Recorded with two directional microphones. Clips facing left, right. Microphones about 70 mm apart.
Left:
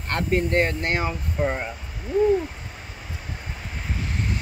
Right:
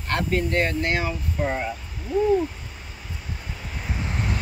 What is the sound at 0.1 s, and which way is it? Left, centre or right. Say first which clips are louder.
Speech: left 1 dB; left.